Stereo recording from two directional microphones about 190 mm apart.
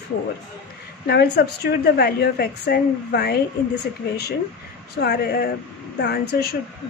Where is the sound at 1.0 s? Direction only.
60° left (ahead or behind).